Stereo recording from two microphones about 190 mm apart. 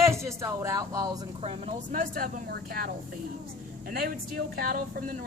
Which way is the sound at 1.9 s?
50° right (ahead or behind).